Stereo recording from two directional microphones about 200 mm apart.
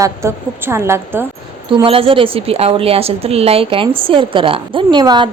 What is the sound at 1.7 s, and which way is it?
A woman's voice, 25° right (ahead or behind).